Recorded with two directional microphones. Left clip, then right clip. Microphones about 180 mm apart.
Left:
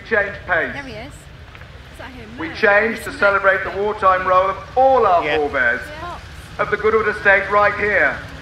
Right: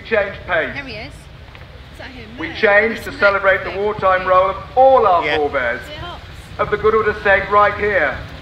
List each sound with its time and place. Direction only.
0.1 s speech: 5° left (ahead or behind)
0.7 s speech: 25° left (ahead or behind)
2.3 s a man's voice: 10° left (ahead or behind)